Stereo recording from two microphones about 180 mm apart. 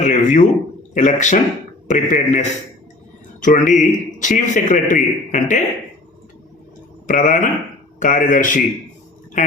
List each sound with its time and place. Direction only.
0.0 s a man's voice: 45° left (ahead or behind)
7.1 s a man's voice: 50° left (ahead or behind)